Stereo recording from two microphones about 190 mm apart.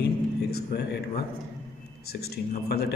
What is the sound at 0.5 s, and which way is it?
Speech, 55° left (ahead or behind).